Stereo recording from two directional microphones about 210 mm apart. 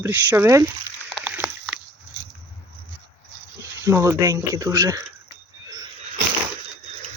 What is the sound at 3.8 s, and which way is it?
Speech, 15° right (ahead or behind).